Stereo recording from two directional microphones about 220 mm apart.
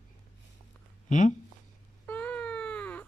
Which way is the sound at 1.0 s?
35° left (ahead or behind).